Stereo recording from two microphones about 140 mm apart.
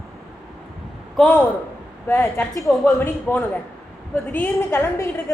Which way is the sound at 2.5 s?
Centre (ahead or behind).